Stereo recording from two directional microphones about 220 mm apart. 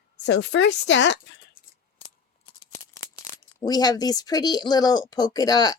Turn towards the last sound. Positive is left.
turn(degrees=20)  # may be behind; listen again after turning